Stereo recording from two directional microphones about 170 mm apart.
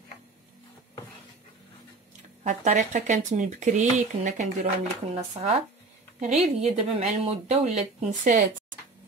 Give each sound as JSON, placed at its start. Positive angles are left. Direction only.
{"t": 2.4, "sound": "speech", "side_deg": -45}
{"t": 5.1, "sound": "speech", "side_deg": -35}